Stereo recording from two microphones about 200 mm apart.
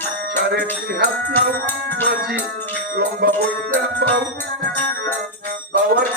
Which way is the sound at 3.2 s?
50° right (ahead or behind).